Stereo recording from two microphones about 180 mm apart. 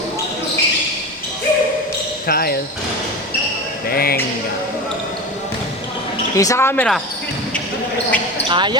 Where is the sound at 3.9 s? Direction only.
55° left (ahead or behind).